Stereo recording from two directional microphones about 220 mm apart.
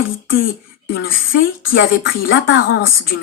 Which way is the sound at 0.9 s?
40° left (ahead or behind).